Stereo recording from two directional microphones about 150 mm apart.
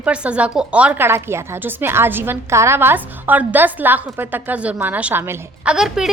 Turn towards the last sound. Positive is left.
turn(degrees=-5)  # may be behind; listen again after turning